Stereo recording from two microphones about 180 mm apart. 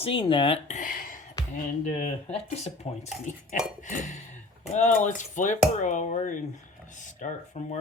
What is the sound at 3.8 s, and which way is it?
Chink, 45° left (ahead or behind).